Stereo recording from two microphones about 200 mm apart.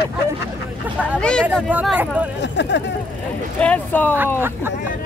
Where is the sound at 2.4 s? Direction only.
60° left (ahead or behind).